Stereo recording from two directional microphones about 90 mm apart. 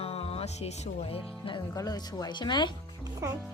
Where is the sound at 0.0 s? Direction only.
90° left.